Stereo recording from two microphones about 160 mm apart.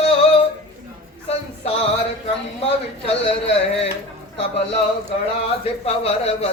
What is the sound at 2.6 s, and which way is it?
Speech, 40° left (ahead or behind).